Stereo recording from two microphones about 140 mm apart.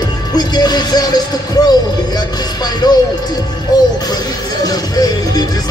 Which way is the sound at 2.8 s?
30° left (ahead or behind).